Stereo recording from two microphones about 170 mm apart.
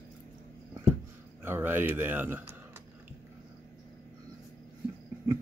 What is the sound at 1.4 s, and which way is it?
A man's voice, 15° right (ahead or behind).